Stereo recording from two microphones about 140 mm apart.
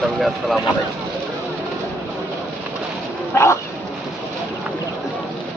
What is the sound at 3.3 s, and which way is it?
Dog, 20° left (ahead or behind).